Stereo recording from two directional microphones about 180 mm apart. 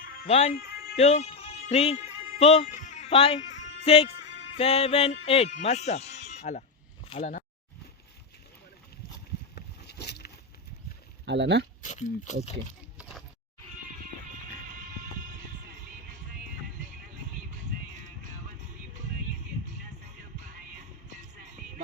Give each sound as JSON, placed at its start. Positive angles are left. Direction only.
{"t": 0.0, "sound": "music", "side_deg": 55}
{"t": 0.3, "sound": "speech", "side_deg": 35}
{"t": 0.5, "sound": "music", "side_deg": 60}
{"t": 0.9, "sound": "speech", "side_deg": 35}
{"t": 9.6, "sound": "boat", "side_deg": 65}
{"t": 11.3, "sound": "speech", "side_deg": -75}
{"t": 11.8, "sound": "speech", "side_deg": 40}